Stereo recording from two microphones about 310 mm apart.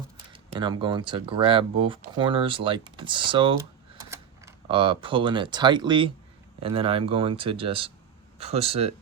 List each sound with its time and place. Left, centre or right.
0.3 s speech: centre